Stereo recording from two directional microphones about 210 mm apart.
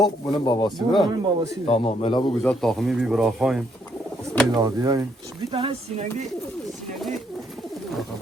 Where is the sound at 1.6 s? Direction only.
30° left (ahead or behind).